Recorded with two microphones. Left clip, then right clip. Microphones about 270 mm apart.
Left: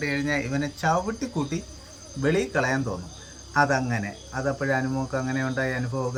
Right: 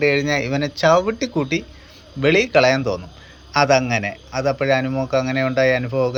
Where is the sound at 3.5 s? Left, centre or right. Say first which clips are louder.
Right 7 dB; centre.